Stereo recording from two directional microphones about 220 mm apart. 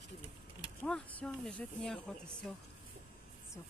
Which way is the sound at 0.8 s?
5° left (ahead or behind).